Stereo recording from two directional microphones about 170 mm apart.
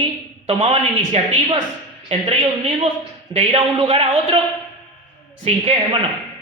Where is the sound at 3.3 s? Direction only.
35° right (ahead or behind).